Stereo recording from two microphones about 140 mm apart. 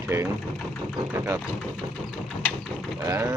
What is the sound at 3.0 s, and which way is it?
Speech, 25° right (ahead or behind).